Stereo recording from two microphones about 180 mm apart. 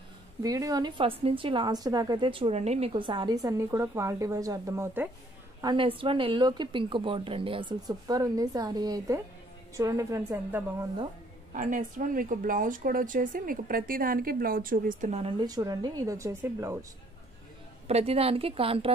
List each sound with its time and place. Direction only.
0.4 s a woman's voice: 20° right (ahead or behind)
5.6 s a woman's voice: 25° right (ahead or behind)
11.5 s speech: 45° right (ahead or behind); by 16.8 s 15° right (ahead or behind)
17.8 s a woman's voice: 35° right (ahead or behind)